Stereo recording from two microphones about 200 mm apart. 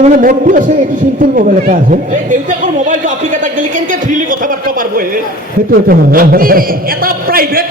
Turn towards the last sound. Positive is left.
turn(degrees=-45)  # may be behind; listen again after turning